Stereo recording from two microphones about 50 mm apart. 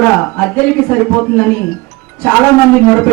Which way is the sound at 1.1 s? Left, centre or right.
Centre.